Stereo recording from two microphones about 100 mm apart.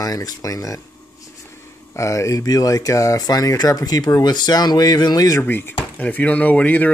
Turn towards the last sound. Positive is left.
turn(degrees=15)  # may be behind; listen again after turning